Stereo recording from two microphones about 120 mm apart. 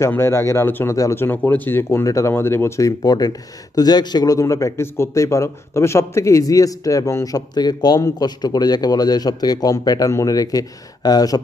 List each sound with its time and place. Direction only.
0.0 s speech: 20° left (ahead or behind)